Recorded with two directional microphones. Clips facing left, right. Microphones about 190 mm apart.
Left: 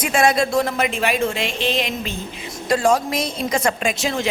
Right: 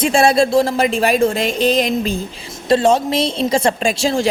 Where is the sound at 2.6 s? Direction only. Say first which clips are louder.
Right 4 dB; 25° right (ahead or behind).